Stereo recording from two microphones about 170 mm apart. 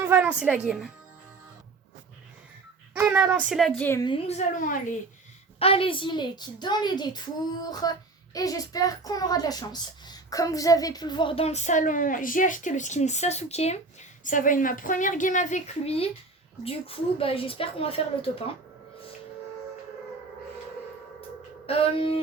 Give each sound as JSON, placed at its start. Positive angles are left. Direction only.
{"t": 0.0, "sound": "a woman's voice", "side_deg": -10}
{"t": 2.9, "sound": "a woman's voice", "side_deg": -10}
{"t": 4.0, "sound": "a woman's voice", "side_deg": 30}
{"t": 4.4, "sound": "a woman's voice", "side_deg": 50}
{"t": 5.5, "sound": "a woman's voice", "side_deg": 35}
{"t": 14.3, "sound": "a woman's voice", "side_deg": 50}
{"t": 21.7, "sound": "a woman's voice", "side_deg": 35}